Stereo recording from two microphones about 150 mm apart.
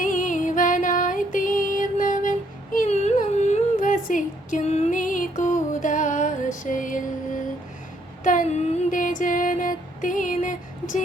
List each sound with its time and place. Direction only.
0.0 s music: 60° left (ahead or behind)
2.7 s humming: 50° left (ahead or behind)
8.2 s a sound: 60° left (ahead or behind)